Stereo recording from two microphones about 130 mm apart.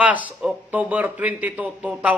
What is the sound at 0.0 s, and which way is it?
A man's voice, 10° right (ahead or behind).